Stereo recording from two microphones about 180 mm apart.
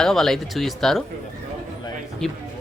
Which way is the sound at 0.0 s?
Centre (ahead or behind).